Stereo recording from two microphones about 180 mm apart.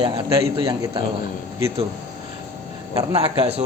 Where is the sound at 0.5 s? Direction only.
25° right (ahead or behind).